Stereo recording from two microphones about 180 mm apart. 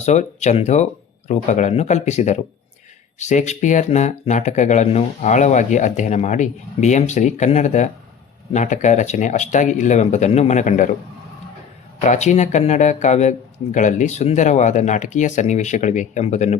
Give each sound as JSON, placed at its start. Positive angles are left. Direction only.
{"t": 0.0, "sound": "speech", "side_deg": 40}
{"t": 11.9, "sound": "speech", "side_deg": 40}